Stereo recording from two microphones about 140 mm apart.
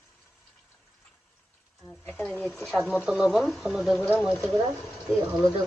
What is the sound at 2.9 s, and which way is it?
Speech, 5° right (ahead or behind).